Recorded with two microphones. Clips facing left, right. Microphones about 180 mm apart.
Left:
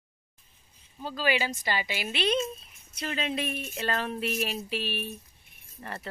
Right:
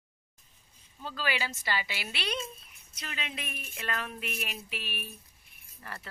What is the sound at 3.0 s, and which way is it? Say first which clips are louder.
A woman's voice: left 10 dB; 35° left (ahead or behind).